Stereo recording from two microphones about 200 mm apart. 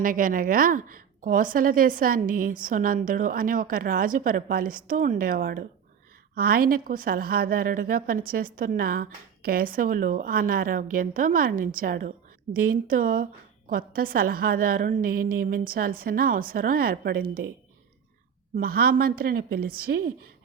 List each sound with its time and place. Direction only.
0.0 s a woman's voice: 45° right (ahead or behind)
18.5 s a woman's voice: 50° right (ahead or behind)